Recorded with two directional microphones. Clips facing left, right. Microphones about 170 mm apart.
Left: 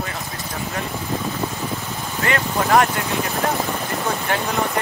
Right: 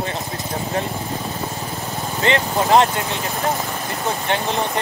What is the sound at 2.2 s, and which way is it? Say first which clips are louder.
Speech: right 2 dB; 25° right (ahead or behind).